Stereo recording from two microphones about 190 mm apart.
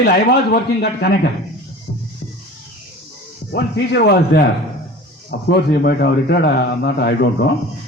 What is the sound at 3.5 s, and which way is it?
Speech, 60° left (ahead or behind).